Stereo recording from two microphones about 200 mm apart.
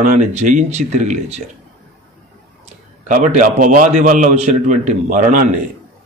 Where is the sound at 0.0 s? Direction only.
40° right (ahead or behind).